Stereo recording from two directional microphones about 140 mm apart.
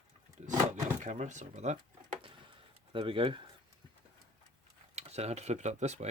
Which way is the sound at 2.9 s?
40° right (ahead or behind).